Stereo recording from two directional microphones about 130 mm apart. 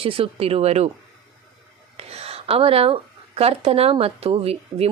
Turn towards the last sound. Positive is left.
turn(degrees=-45)  # may be behind; listen again after turning